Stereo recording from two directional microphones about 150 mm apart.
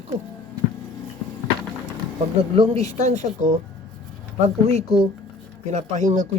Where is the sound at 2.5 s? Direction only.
45° right (ahead or behind).